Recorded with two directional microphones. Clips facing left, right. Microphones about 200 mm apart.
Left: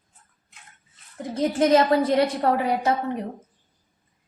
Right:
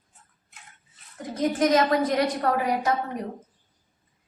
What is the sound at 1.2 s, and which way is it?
A woman's voice, 30° left (ahead or behind).